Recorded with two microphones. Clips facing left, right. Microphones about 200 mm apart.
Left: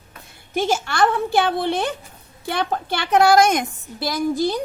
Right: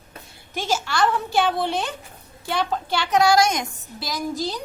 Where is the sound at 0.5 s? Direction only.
55° left (ahead or behind).